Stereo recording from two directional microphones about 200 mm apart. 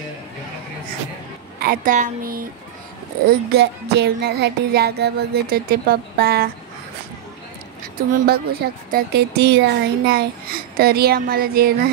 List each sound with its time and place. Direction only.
1.6 s a woman's voice: 45° right (ahead or behind)
3.5 s a woman's voice: 55° right (ahead or behind)
8.1 s a woman's voice: 50° right (ahead or behind)